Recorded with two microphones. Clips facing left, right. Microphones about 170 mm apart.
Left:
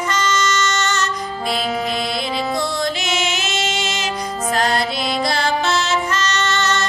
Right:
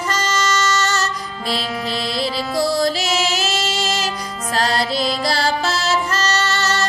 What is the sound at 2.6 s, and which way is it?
Music, 35° right (ahead or behind).